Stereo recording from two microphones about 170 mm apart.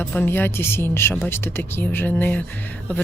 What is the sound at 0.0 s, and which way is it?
Speech, 10° left (ahead or behind).